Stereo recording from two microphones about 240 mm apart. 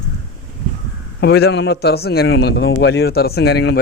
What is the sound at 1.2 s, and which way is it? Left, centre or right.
A man's voice, left.